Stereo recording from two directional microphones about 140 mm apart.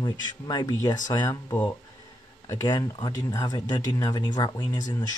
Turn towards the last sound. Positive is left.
turn(degrees=30)  # may be behind; listen again after turning